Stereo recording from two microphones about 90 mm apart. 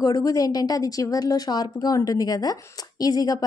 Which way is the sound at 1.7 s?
40° left (ahead or behind).